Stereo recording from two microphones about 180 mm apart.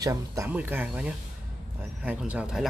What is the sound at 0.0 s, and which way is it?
Speech, 20° right (ahead or behind).